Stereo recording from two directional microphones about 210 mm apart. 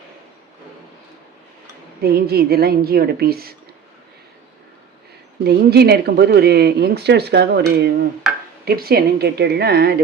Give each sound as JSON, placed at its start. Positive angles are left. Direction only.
{"t": 2.0, "sound": "speech", "side_deg": -50}
{"t": 5.4, "sound": "speech", "side_deg": -50}